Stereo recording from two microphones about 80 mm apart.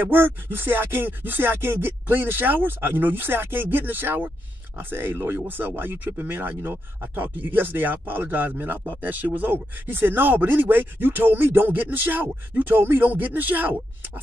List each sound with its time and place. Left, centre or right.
0.0 s speech: right